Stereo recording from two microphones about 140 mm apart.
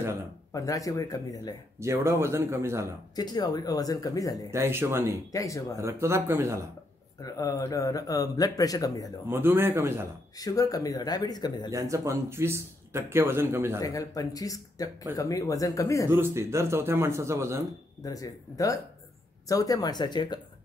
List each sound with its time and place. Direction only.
0.5 s speech: 25° left (ahead or behind)
1.8 s speech: 20° right (ahead or behind)
3.2 s speech: 30° left (ahead or behind)
4.5 s speech: 20° right (ahead or behind)
5.3 s speech: 25° left (ahead or behind)
5.8 s speech: 20° right (ahead or behind)
7.2 s speech: 25° left (ahead or behind)
9.3 s speech: 15° right (ahead or behind)
10.3 s speech: 25° left (ahead or behind)
11.7 s speech: 20° right (ahead or behind)
13.7 s speech: 25° left (ahead or behind)
16.1 s speech: 20° right (ahead or behind)
18.0 s speech: 25° left (ahead or behind)